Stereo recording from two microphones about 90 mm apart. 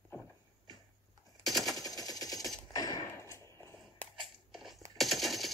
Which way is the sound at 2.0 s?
45° left (ahead or behind).